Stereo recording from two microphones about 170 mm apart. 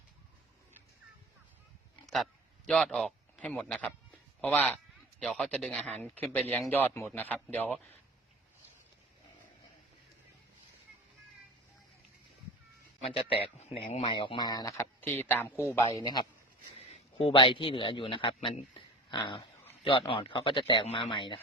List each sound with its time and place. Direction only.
2.0 s a man's voice: centre (ahead or behind)
13.3 s speech: 35° left (ahead or behind)
16.9 s a man's voice: 35° left (ahead or behind)